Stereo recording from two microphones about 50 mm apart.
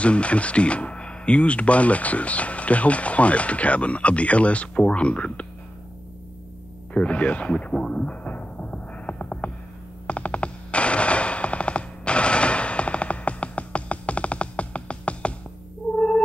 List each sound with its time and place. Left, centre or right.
0.0 s speech: left
6.9 s speech: left
8.3 s music: left
10.0 s machine gun: left